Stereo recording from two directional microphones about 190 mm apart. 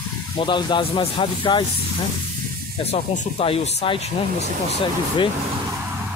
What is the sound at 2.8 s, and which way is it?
Speech, 35° left (ahead or behind).